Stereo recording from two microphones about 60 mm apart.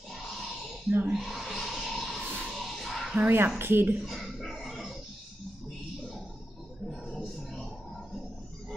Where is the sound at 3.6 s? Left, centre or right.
Right.